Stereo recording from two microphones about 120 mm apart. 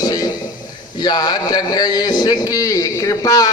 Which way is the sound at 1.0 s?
35° left (ahead or behind).